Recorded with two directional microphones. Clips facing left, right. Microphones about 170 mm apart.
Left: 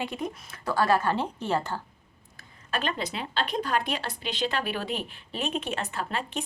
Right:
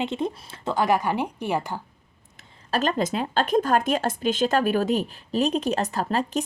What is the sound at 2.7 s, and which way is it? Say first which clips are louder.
Speech: right 7 dB; 40° right (ahead or behind).